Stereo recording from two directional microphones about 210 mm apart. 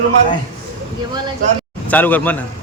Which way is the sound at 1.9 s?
10° left (ahead or behind).